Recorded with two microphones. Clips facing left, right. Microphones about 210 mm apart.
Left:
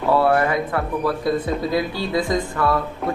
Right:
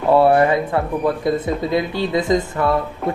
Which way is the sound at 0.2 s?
25° right (ahead or behind).